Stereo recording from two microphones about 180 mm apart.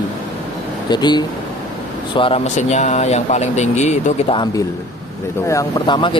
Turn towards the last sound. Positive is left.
turn(degrees=25)  # may be behind; listen again after turning